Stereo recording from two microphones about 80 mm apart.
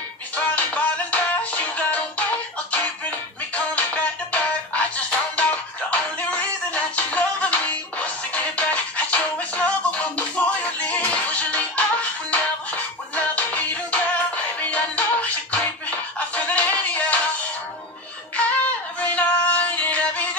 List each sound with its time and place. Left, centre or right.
0.4 s music: centre
18.9 s music: centre